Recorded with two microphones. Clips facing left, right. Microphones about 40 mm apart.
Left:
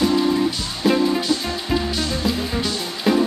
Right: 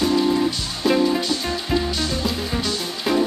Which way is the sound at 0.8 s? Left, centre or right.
Centre.